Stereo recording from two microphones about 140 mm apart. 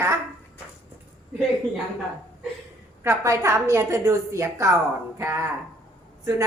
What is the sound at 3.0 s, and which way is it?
A woman's voice, 20° right (ahead or behind).